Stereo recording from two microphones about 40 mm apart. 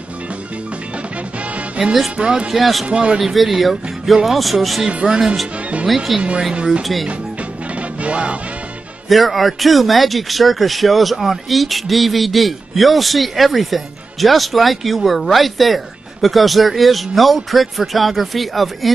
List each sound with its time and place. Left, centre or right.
1.8 s speech: right
2.5 s speech: centre
2.9 s speech: right
3.3 s speech: centre
4.8 s speech: right
6.1 s speech: centre
6.5 s speech: right
6.8 s speech: centre
8.0 s music: right
9.1 s speech: centre